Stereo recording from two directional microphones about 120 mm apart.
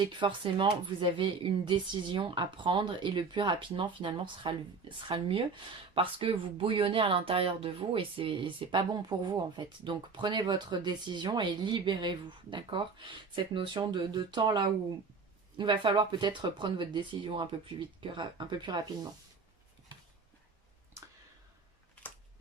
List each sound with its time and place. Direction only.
0.0 s speech: 40° right (ahead or behind)